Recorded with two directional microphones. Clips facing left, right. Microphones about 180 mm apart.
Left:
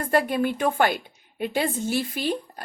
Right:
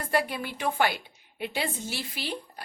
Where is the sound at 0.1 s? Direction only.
50° left (ahead or behind).